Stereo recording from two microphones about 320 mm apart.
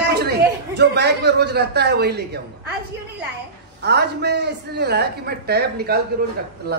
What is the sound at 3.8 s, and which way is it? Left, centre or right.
A man's voice, right.